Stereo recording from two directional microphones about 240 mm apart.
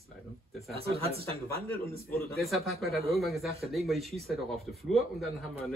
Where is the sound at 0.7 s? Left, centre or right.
Right.